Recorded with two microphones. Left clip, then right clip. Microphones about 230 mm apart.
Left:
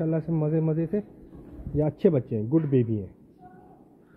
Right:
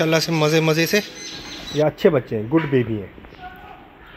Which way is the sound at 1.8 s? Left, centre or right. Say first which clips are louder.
Right 7 dB; centre.